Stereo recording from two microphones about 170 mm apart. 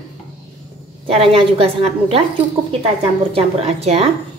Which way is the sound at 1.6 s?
35° right (ahead or behind).